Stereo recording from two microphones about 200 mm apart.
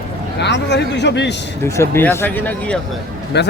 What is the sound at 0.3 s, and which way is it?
A man's voice, 60° left (ahead or behind).